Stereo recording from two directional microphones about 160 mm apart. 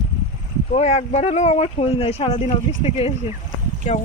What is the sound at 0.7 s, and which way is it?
Speech, 45° left (ahead or behind).